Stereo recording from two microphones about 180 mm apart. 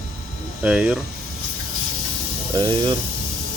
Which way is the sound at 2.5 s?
25° right (ahead or behind).